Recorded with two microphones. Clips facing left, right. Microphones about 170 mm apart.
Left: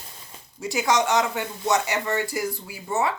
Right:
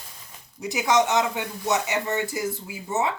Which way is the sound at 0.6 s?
20° right (ahead or behind).